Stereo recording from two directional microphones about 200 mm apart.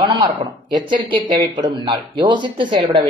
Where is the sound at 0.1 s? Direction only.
25° right (ahead or behind).